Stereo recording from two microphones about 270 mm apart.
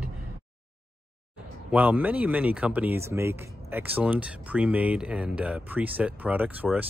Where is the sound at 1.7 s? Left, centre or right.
Centre.